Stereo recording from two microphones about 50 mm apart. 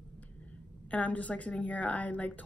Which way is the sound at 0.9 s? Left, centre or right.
Left.